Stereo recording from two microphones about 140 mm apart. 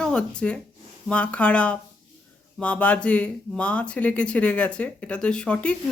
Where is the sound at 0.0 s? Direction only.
5° left (ahead or behind).